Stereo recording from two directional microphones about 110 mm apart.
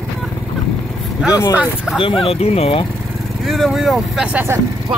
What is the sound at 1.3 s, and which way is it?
Speech, 35° left (ahead or behind).